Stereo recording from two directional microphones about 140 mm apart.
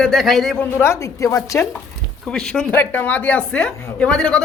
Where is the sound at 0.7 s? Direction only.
20° left (ahead or behind).